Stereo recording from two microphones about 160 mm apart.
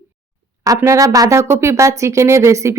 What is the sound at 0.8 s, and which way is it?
Speech, 20° right (ahead or behind).